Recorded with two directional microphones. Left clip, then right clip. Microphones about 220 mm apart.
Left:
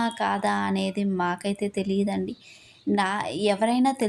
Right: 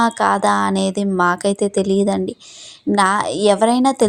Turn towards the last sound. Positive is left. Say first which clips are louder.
# right 9 dB
turn(degrees=-35)  # may be behind; listen again after turning